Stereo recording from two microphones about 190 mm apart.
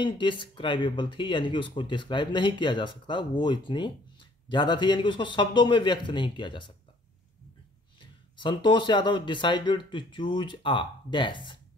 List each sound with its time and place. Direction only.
0.0 s speech: 25° left (ahead or behind)
8.0 s speech: 25° left (ahead or behind)